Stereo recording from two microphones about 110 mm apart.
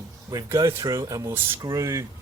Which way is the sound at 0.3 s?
30° right (ahead or behind).